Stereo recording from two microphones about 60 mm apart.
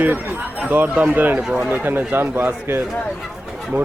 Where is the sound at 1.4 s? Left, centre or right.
Centre.